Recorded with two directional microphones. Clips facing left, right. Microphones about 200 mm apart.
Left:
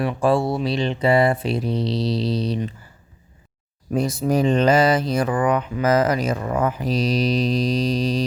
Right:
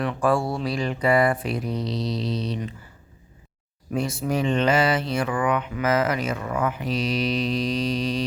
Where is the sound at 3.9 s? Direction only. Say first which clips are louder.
Left 5 dB; 40° left (ahead or behind).